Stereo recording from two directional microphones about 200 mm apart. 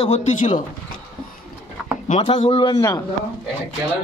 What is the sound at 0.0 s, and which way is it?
Speech, 35° left (ahead or behind).